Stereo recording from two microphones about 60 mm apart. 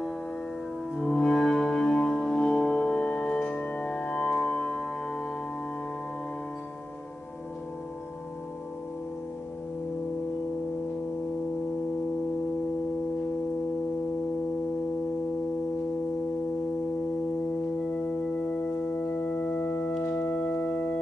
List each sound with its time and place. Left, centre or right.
1.0 s music: centre
19.2 s music: left
20.0 s organ: left